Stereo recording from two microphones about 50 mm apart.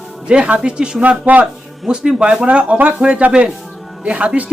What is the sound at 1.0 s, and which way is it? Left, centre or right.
Speech, right.